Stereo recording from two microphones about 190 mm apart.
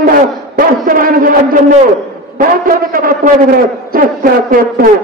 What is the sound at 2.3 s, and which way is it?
A man's voice, 50° right (ahead or behind).